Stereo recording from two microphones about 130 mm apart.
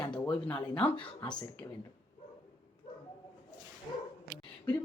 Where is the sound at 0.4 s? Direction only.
10° left (ahead or behind).